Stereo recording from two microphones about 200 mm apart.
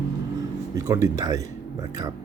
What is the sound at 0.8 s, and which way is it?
Speech, 15° right (ahead or behind).